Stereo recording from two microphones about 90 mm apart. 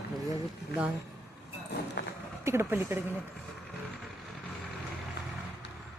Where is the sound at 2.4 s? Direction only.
30° right (ahead or behind).